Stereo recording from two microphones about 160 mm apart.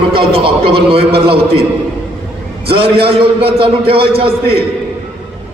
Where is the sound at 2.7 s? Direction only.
35° right (ahead or behind).